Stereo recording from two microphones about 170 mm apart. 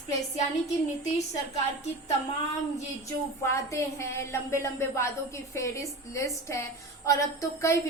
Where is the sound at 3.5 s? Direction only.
15° left (ahead or behind).